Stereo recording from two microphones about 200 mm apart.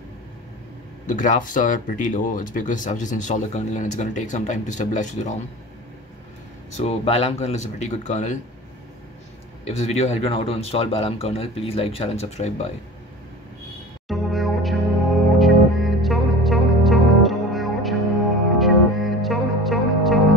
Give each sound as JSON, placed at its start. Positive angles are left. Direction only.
{"t": 1.0, "sound": "speech", "side_deg": 40}
{"t": 6.8, "sound": "speech", "side_deg": 30}
{"t": 9.7, "sound": "speech", "side_deg": 30}
{"t": 14.0, "sound": "music", "side_deg": 0}